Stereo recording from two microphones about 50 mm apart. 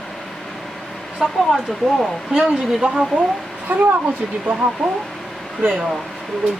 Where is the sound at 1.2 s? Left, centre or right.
Centre.